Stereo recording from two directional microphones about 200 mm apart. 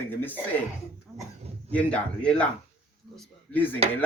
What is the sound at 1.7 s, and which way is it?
Speech, 5° left (ahead or behind).